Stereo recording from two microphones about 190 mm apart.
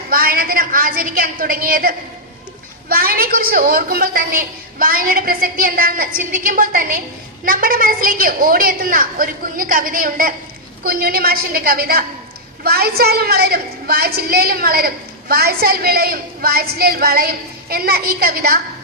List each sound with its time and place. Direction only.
0.1 s a woman's voice: 50° right (ahead or behind)